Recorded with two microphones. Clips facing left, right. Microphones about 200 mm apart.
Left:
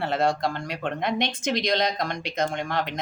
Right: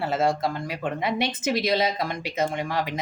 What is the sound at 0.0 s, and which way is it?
Speech, centre (ahead or behind).